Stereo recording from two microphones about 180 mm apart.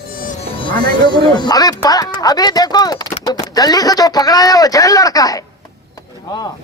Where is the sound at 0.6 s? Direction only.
25° left (ahead or behind).